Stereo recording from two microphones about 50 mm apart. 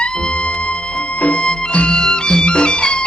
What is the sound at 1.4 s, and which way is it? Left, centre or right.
Music, centre.